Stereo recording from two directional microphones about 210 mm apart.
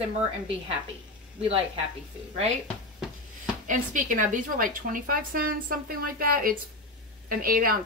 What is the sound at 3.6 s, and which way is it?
A woman's voice, 40° right (ahead or behind).